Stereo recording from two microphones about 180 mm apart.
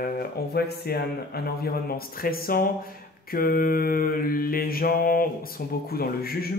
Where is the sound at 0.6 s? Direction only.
60° left (ahead or behind).